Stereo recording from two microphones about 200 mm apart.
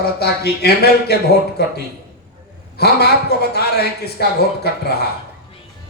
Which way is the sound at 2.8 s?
55° left (ahead or behind).